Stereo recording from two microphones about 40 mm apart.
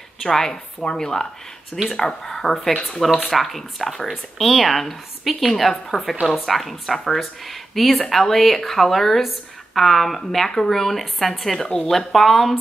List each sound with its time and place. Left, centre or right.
0.2 s a woman's voice: centre
11.6 s speech: centre
12.1 s a woman's voice: centre